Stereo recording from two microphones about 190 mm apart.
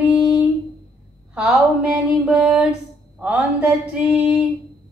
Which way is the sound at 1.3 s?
5° right (ahead or behind).